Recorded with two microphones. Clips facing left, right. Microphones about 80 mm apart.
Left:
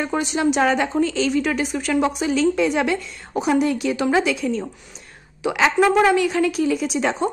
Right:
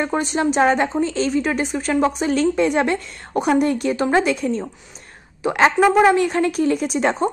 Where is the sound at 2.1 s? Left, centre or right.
Right.